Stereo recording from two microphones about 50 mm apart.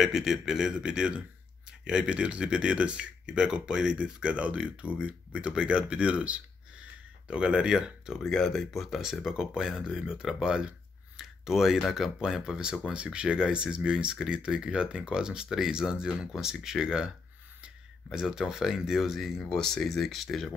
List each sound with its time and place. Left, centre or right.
0.0 s speech: centre
8.2 s speech: centre
9.2 s speech: centre
18.1 s speech: centre
19.5 s speech: centre